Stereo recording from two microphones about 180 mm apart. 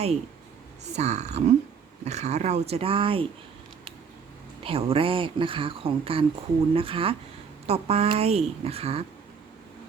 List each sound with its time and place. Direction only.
0.9 s a woman's voice: 40° right (ahead or behind)
4.6 s a woman's voice: 30° right (ahead or behind)